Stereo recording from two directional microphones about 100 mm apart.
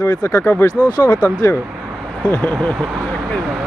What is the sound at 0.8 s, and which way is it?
Speech, 45° left (ahead or behind).